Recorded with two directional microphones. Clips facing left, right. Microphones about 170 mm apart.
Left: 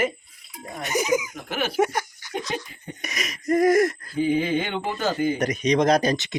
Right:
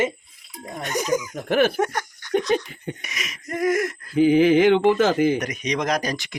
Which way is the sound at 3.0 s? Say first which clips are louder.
Left 8 dB; 40° left (ahead or behind).